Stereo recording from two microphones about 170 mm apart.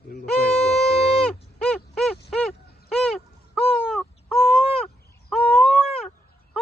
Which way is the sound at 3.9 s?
5° left (ahead or behind).